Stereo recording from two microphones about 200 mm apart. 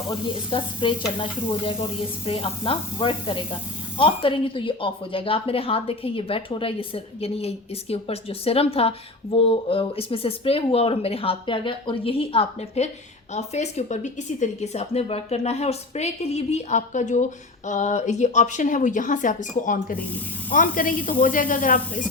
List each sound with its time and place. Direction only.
0.1 s a woman's voice: 25° left (ahead or behind); by 22.0 s 45° left (ahead or behind)